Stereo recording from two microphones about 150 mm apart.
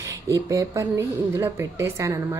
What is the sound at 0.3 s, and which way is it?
A woman's voice, 20° right (ahead or behind).